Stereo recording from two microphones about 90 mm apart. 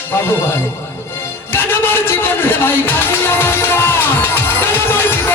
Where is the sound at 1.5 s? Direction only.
25° left (ahead or behind).